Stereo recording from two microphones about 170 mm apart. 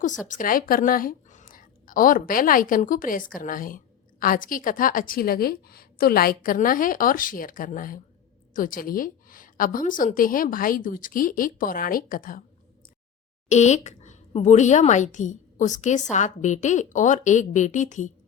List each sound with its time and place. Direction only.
0.3 s a woman's voice: 55° left (ahead or behind)
13.5 s a woman's voice: 45° left (ahead or behind)